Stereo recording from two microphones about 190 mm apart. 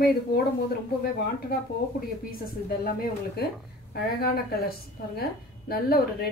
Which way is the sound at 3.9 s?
55° left (ahead or behind).